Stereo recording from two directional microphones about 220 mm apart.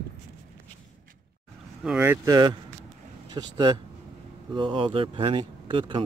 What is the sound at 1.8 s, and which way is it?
Speech, 5° right (ahead or behind).